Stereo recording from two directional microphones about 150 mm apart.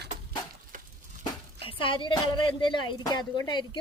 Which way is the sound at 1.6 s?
35° left (ahead or behind).